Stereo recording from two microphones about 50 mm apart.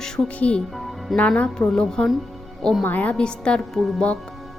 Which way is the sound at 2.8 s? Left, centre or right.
Left.